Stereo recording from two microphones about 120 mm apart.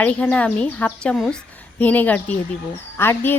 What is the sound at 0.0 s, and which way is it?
Speech, 10° left (ahead or behind).